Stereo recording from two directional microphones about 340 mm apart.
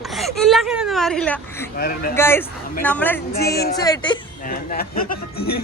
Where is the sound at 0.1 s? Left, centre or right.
Centre.